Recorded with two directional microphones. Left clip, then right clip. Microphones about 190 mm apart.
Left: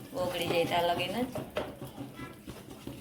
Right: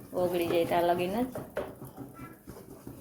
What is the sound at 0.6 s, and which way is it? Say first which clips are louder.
Speech: right 1 dB; 55° right (ahead or behind).